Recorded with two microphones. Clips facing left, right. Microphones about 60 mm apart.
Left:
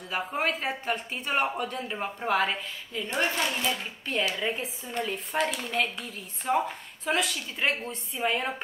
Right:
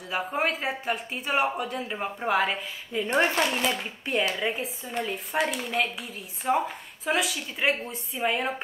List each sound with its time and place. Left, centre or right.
0.1 s speech: centre
3.1 s speech: right
3.4 s speech: centre